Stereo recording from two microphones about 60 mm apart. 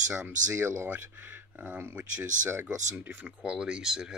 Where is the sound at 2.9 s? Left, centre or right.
Right.